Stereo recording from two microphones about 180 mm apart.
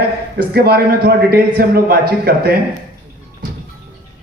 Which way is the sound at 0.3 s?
60° right (ahead or behind).